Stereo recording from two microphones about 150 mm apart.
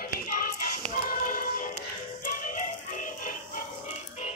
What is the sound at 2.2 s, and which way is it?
Music, 65° left (ahead or behind).